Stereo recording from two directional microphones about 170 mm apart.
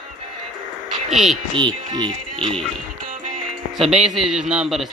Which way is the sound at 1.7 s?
25° right (ahead or behind).